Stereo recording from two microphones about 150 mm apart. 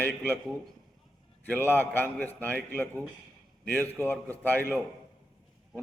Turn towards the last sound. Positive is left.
turn(degrees=10)  # may be behind; listen again after turning